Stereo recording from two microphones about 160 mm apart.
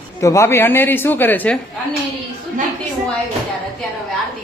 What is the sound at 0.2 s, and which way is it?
A man's voice, 20° left (ahead or behind).